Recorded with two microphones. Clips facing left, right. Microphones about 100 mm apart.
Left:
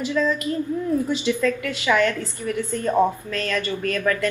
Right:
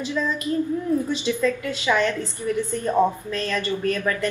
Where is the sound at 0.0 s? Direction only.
20° right (ahead or behind).